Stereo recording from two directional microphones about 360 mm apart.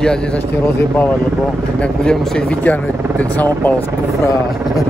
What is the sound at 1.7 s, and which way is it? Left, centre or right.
Speech, centre.